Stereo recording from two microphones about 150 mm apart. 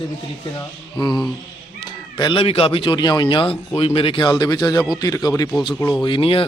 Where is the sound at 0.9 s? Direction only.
30° left (ahead or behind).